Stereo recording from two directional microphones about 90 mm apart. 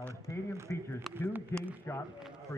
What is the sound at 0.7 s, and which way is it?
A man's voice, 30° left (ahead or behind).